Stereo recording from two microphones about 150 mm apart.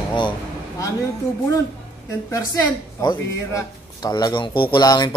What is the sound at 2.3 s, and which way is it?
A woman's voice, 25° left (ahead or behind).